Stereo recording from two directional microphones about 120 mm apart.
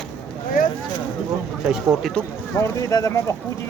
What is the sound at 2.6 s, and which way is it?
Speech, 25° left (ahead or behind).